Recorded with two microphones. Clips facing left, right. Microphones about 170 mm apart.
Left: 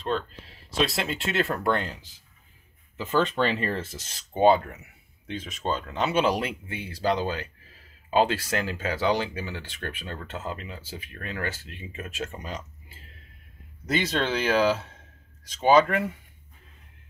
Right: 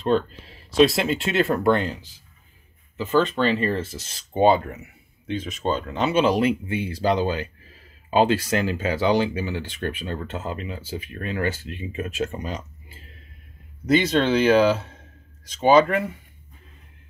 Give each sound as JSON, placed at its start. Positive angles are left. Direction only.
{"t": 0.7, "sound": "speech", "side_deg": -5}
{"t": 3.2, "sound": "speech", "side_deg": 15}
{"t": 3.5, "sound": "speech", "side_deg": 0}
{"t": 9.6, "sound": "speech", "side_deg": -20}
{"t": 13.8, "sound": "speech", "side_deg": 0}